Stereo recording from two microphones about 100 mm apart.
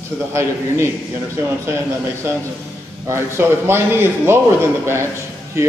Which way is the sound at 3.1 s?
25° right (ahead or behind).